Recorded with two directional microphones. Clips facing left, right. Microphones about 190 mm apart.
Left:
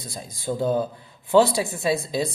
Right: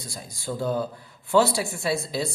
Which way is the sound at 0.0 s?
20° left (ahead or behind).